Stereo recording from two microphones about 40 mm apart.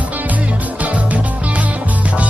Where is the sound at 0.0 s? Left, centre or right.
Right.